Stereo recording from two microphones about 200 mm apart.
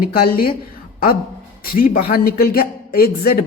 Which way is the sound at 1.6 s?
45° left (ahead or behind).